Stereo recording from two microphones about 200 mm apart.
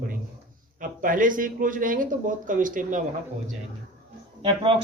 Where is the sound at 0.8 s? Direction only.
40° right (ahead or behind).